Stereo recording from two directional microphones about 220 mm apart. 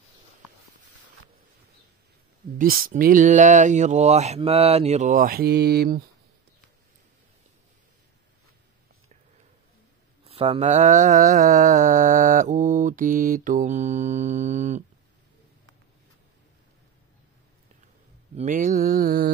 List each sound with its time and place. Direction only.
2.6 s mantra: 40° right (ahead or behind)
10.2 s mantra: 25° right (ahead or behind)
18.3 s mantra: 35° right (ahead or behind)